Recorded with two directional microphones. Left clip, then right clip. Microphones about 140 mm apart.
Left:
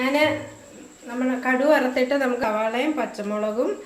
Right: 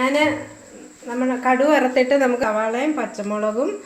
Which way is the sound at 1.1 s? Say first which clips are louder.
Right 5 dB; 70° right (ahead or behind).